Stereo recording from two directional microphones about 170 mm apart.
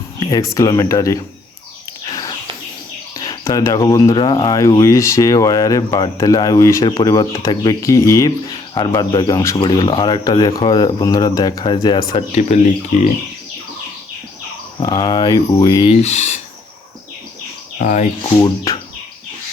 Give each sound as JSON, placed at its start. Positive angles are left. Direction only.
{"t": 0.2, "sound": "speech", "side_deg": 25}
{"t": 2.0, "sound": "a sound", "side_deg": 20}
{"t": 3.2, "sound": "speech", "side_deg": 20}
{"t": 12.3, "sound": "speech", "side_deg": 40}
{"t": 14.8, "sound": "speech", "side_deg": 25}
{"t": 15.9, "sound": "speech", "side_deg": 40}
{"t": 17.7, "sound": "speech", "side_deg": 45}
{"t": 18.4, "sound": "speech", "side_deg": 20}